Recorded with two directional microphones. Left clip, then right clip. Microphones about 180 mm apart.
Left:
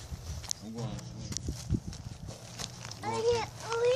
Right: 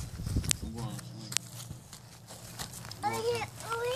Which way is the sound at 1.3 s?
5° left (ahead or behind).